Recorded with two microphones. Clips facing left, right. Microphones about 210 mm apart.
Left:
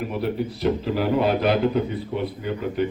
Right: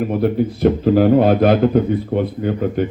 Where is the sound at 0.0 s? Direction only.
50° right (ahead or behind).